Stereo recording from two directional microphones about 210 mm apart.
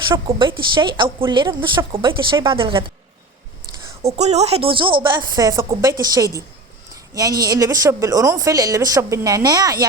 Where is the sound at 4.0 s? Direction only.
30° right (ahead or behind).